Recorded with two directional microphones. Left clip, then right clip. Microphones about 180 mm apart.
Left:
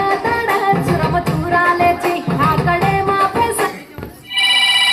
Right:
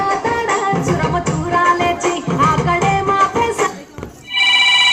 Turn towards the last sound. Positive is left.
turn(degrees=30)  # may be behind; listen again after turning